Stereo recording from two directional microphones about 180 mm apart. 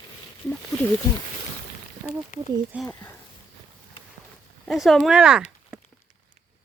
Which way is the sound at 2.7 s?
5° right (ahead or behind).